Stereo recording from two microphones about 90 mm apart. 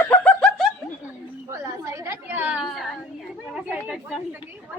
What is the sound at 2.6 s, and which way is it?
Speech, centre (ahead or behind).